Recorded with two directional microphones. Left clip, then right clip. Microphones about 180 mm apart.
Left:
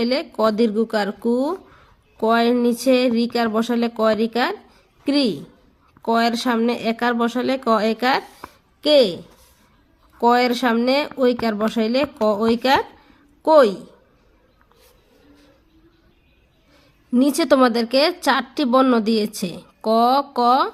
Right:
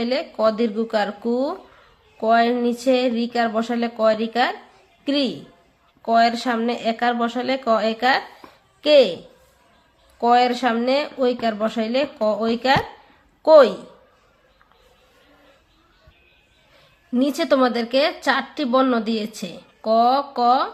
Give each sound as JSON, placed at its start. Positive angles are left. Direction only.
{"t": 0.0, "sound": "speech", "side_deg": 40}
{"t": 10.2, "sound": "speech", "side_deg": 35}
{"t": 13.4, "sound": "a woman's voice", "side_deg": 25}
{"t": 17.1, "sound": "speech", "side_deg": 35}